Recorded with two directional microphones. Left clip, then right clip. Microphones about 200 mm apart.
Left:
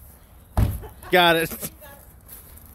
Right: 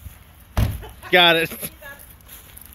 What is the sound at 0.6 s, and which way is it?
Slam, 35° right (ahead or behind).